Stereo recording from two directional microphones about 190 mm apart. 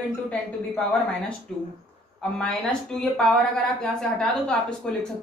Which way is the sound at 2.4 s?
5° left (ahead or behind).